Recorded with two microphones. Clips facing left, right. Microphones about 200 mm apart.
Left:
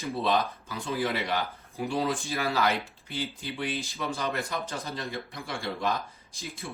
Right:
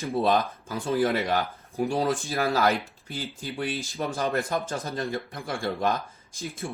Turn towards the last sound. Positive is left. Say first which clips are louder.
# right 5 dB
turn(degrees=-50)  # may be behind; listen again after turning